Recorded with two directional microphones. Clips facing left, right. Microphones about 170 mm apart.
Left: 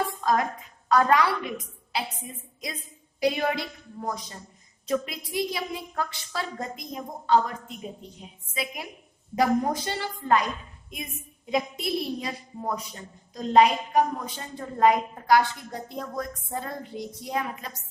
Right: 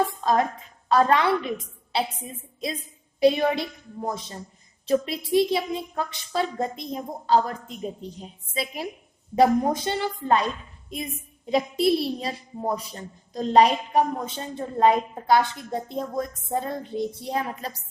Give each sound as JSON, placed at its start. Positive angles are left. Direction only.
{"t": 0.1, "sound": "a sound", "side_deg": -25}
{"t": 0.9, "sound": "a woman's voice", "side_deg": -25}
{"t": 8.5, "sound": "a woman's voice", "side_deg": -30}